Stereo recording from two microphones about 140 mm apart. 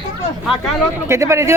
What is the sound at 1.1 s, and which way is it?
Speech, 20° right (ahead or behind).